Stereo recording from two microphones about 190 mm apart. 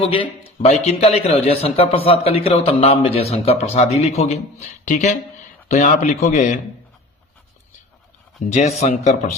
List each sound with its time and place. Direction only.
0.4 s a man's voice: 35° left (ahead or behind)
8.4 s a man's voice: 35° left (ahead or behind)